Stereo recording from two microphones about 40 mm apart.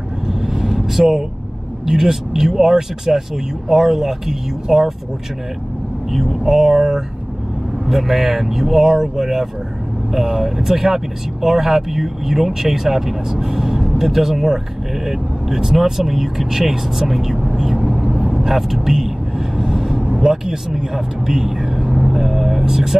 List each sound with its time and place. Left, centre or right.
0.3 s vehicle: centre
1.9 s speech: centre
6.1 s speech: centre
17.8 s vehicle: centre
18.5 s vehicle: centre
20.1 s speech: centre
22.1 s vehicle: centre